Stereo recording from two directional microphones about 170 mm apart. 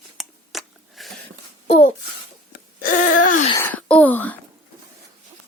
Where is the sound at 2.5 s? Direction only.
55° left (ahead or behind).